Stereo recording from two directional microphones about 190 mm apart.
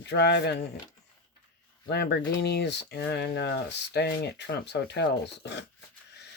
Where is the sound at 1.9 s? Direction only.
60° left (ahead or behind).